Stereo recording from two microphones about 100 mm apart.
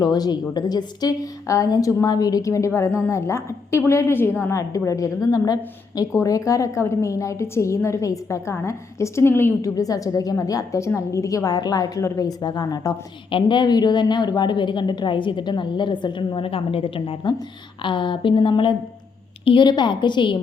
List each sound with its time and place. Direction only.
0.0 s a woman's voice: 45° left (ahead or behind)
13.3 s a woman's voice: 50° left (ahead or behind); by 17.2 s 70° left (ahead or behind)
17.8 s a woman's voice: 55° left (ahead or behind)